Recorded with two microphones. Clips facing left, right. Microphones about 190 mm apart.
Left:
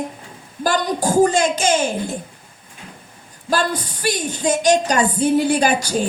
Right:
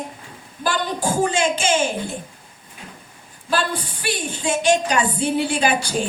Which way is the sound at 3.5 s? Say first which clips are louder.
Left 2 dB; 40° left (ahead or behind).